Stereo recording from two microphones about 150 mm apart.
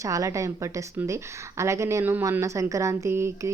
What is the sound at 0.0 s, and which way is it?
A woman's voice, 20° right (ahead or behind).